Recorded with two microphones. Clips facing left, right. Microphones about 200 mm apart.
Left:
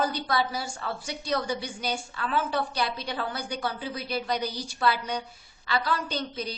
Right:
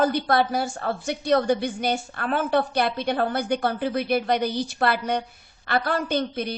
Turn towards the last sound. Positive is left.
turn(degrees=-55)  # may be behind; listen again after turning